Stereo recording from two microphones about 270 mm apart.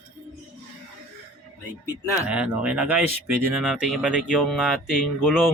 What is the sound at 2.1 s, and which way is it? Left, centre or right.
Speech, centre.